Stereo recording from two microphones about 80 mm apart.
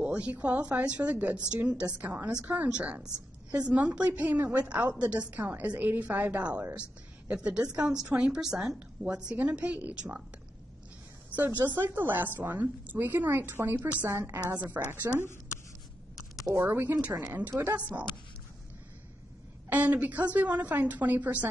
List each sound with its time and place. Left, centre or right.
0.0 s a woman's voice: centre
11.3 s a woman's voice: right
14.5 s a woman's voice: right
15.1 s a woman's voice: right
16.6 s a woman's voice: right
17.7 s a woman's voice: centre
19.7 s a woman's voice: centre